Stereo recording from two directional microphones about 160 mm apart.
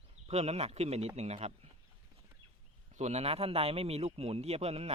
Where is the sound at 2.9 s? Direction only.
45° right (ahead or behind).